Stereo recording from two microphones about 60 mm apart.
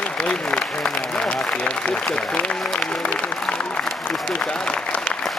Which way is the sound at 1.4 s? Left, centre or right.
Centre.